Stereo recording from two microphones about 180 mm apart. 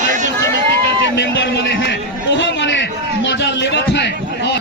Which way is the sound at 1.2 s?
85° left.